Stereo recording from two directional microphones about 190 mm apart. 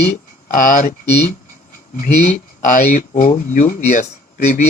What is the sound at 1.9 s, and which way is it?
Speech, 40° left (ahead or behind).